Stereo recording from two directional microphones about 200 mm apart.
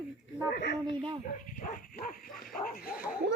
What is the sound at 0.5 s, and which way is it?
Speech, 55° left (ahead or behind).